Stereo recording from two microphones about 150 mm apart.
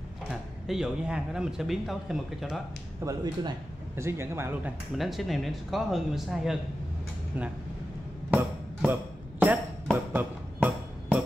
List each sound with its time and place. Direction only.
0.3 s speech: 5° right (ahead or behind)
3.0 s a man's voice: 20° right (ahead or behind)
4.9 s speech: centre (ahead or behind)
9.4 s a sound: 10° right (ahead or behind)